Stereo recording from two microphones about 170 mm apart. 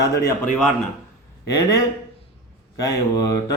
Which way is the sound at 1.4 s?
20° left (ahead or behind).